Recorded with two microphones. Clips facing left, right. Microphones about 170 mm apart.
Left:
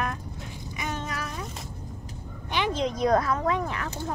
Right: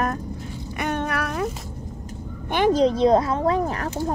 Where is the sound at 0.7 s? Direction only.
60° right (ahead or behind).